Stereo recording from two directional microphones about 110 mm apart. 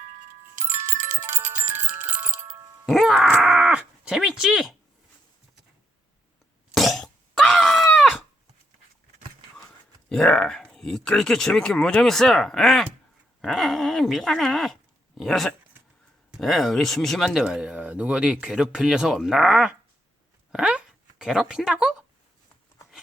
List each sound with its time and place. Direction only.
0.6 s music: 25° right (ahead or behind)
2.8 s groan: centre (ahead or behind)
6.7 s cough: centre (ahead or behind)
10.1 s speech: 5° left (ahead or behind)
20.5 s a sound: 10° right (ahead or behind)